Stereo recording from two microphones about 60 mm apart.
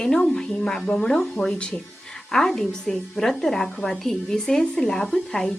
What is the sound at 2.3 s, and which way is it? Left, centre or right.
Speech, centre.